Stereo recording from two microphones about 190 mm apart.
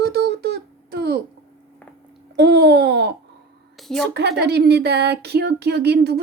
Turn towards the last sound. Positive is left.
turn(degrees=-60)  # may be behind; listen again after turning